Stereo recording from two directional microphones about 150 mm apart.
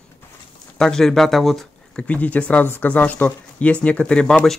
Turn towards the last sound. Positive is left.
turn(degrees=5)  # may be behind; listen again after turning